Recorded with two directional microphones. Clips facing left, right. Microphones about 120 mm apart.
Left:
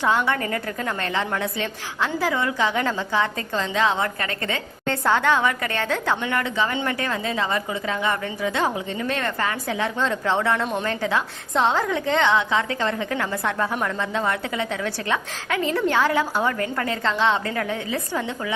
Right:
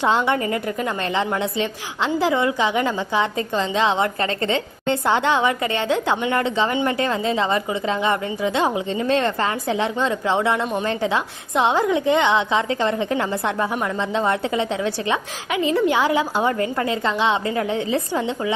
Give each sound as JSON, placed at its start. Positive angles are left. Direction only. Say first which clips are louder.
{"t": 0.0, "sound": "a woman's voice", "louder": "right 2 dB", "side_deg": -20}